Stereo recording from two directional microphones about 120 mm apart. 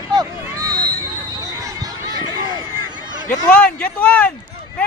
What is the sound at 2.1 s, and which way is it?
Run, 35° left (ahead or behind).